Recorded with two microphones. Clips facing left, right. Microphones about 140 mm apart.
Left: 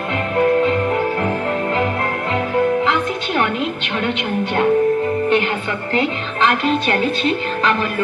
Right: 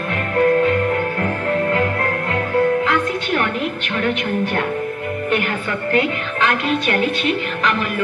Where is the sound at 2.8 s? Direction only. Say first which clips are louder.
Even; 25° left (ahead or behind).